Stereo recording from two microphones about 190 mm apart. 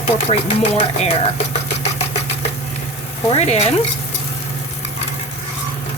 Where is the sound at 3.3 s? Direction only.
35° left (ahead or behind).